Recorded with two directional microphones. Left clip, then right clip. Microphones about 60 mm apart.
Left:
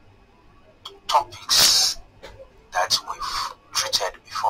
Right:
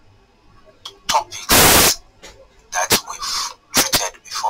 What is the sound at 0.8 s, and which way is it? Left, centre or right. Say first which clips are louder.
Tick-tock: right 2 dB; right.